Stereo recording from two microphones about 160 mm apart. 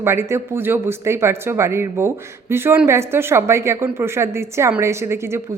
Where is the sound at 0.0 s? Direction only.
15° right (ahead or behind).